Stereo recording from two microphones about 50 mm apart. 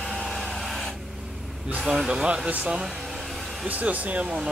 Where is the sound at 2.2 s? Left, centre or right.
Right.